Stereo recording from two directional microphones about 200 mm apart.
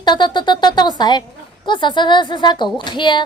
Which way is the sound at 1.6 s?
25° left (ahead or behind).